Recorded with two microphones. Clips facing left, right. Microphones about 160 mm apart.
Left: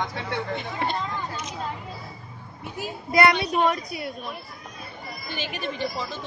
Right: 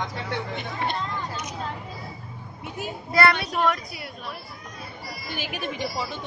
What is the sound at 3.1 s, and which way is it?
A woman's voice, 20° left (ahead or behind).